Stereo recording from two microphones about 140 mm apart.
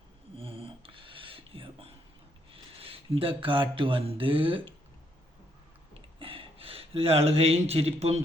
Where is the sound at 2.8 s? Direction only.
40° right (ahead or behind).